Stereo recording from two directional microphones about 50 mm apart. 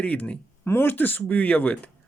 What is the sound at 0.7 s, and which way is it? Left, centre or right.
Speech, left.